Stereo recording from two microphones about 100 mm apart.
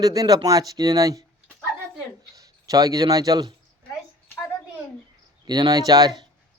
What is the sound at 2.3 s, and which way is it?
Speech, 35° right (ahead or behind).